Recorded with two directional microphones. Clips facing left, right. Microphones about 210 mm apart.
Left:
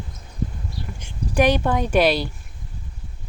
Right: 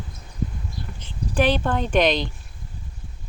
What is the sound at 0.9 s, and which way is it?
Speech, 10° left (ahead or behind).